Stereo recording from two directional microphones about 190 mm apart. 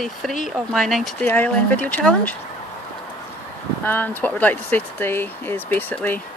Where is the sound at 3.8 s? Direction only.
10° left (ahead or behind).